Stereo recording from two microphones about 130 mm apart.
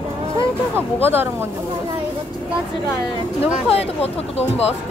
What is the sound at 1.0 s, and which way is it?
Speech, 15° right (ahead or behind).